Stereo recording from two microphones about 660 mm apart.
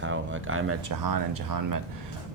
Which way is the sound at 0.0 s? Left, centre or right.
Centre.